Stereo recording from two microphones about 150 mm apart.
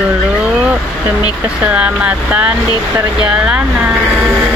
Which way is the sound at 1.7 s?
10° right (ahead or behind).